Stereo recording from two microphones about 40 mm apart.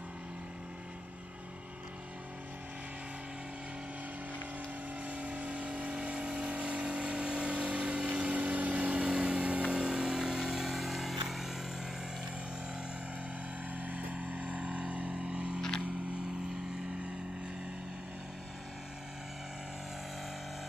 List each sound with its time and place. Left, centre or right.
5.0 s vehicle: right
9.8 s vehicle: centre
13.7 s vehicle: right